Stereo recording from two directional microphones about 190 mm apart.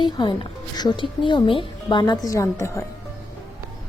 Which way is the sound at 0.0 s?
25° left (ahead or behind).